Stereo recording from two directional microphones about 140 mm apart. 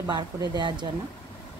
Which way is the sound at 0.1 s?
30° right (ahead or behind).